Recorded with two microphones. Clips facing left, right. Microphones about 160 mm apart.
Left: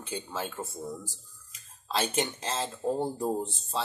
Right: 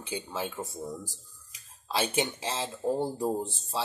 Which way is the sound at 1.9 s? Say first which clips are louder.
Right 1 dB; 10° right (ahead or behind).